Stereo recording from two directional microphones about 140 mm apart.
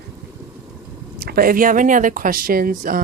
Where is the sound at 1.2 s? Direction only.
90° right.